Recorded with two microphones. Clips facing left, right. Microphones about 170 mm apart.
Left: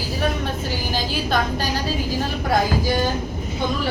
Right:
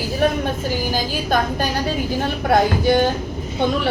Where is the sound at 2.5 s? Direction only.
65° right (ahead or behind).